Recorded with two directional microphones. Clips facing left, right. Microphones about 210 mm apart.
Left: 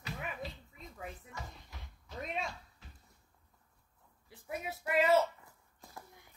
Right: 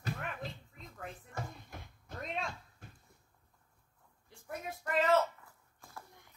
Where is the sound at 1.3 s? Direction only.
50° right (ahead or behind).